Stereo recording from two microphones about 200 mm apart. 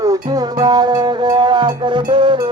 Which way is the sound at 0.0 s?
15° right (ahead or behind).